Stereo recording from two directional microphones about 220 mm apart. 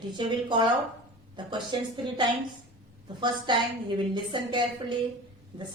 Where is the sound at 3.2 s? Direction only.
20° right (ahead or behind).